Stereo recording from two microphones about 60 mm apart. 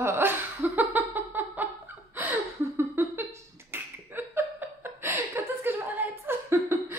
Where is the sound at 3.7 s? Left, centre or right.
Right.